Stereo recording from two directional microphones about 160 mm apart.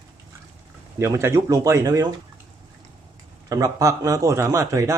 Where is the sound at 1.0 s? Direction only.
15° right (ahead or behind).